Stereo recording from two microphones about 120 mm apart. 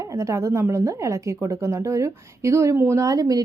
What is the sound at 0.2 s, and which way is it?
A woman's voice, 25° right (ahead or behind).